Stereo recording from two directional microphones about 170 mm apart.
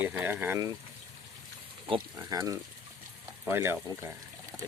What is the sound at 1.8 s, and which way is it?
Speech, 25° right (ahead or behind).